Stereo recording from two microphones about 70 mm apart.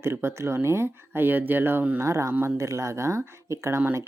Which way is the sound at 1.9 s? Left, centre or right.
Right.